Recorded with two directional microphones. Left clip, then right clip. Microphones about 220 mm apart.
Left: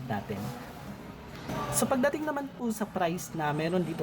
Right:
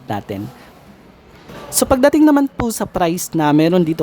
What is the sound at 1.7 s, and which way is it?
Speech, 45° right (ahead or behind).